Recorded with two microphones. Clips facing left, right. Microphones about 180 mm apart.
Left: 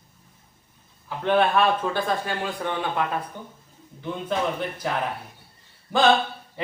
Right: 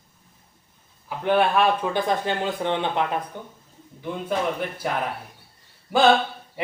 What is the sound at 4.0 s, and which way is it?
Speech, 10° right (ahead or behind).